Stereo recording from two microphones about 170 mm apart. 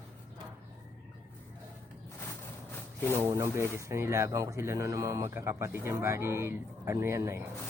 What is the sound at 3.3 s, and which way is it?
Speech, 15° right (ahead or behind).